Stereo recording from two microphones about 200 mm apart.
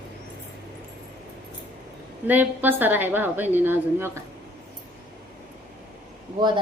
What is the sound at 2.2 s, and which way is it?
A woman's voice, 10° right (ahead or behind).